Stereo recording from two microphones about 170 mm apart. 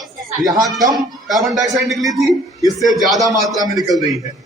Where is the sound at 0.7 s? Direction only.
20° right (ahead or behind).